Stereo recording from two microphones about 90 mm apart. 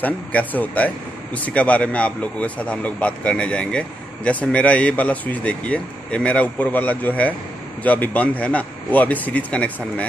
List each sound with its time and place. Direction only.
0.0 s speech: 15° left (ahead or behind)